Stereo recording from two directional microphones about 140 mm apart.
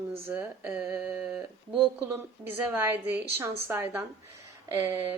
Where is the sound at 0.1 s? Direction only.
15° right (ahead or behind).